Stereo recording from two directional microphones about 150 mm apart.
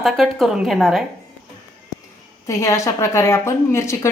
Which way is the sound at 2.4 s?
20° left (ahead or behind).